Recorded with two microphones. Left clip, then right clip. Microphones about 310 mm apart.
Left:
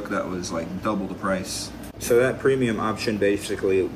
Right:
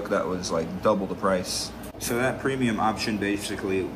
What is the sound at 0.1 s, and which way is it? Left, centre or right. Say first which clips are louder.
A man's voice: right 2 dB; centre.